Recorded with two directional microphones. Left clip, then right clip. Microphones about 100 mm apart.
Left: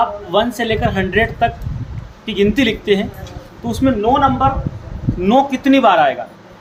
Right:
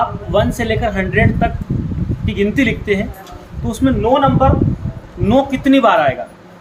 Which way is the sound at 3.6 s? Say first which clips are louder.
Even; 15° left (ahead or behind).